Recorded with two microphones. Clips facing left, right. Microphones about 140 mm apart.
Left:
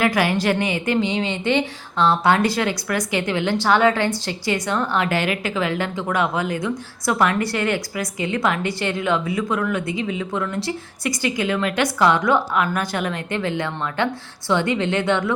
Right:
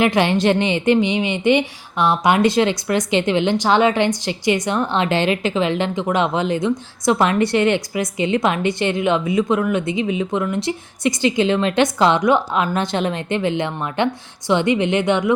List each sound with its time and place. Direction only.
0.0 s a woman's voice: 25° right (ahead or behind)